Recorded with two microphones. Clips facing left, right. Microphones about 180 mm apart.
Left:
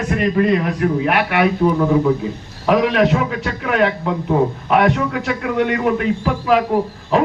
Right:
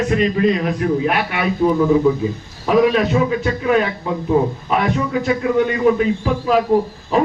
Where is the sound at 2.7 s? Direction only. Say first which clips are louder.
Even; 70° left (ahead or behind).